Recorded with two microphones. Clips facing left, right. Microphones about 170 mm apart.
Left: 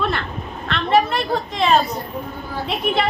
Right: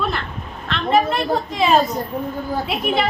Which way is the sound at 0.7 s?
Centre (ahead or behind).